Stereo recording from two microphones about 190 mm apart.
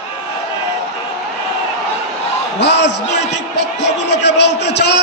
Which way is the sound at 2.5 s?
65° left (ahead or behind).